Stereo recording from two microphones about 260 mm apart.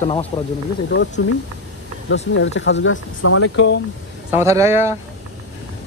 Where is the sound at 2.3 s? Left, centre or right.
Left.